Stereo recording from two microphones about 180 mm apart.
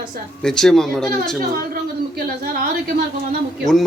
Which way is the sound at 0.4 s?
Centre (ahead or behind).